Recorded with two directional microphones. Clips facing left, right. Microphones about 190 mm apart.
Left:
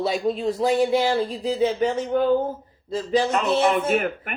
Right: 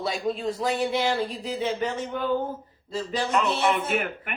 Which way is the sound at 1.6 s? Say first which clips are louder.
Left 6 dB; 45° left (ahead or behind).